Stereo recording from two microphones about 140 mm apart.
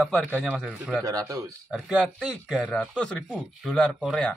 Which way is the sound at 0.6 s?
5° right (ahead or behind).